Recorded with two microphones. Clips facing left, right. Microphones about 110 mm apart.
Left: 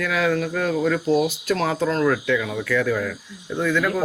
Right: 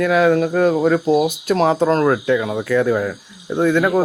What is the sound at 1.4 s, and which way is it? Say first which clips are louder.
Speech: right 6 dB; 25° right (ahead or behind).